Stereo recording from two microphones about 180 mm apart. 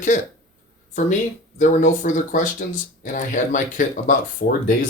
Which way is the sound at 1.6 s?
45° left (ahead or behind).